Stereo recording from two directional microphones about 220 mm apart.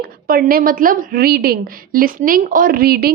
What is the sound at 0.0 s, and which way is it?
A woman's voice, 40° right (ahead or behind).